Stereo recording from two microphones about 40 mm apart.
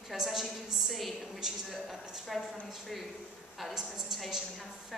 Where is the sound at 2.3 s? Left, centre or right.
Centre.